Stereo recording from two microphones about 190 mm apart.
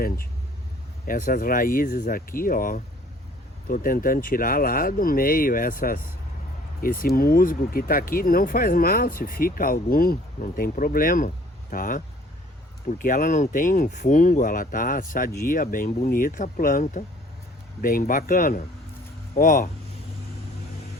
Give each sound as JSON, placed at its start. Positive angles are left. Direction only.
{"t": 1.0, "sound": "speech", "side_deg": 45}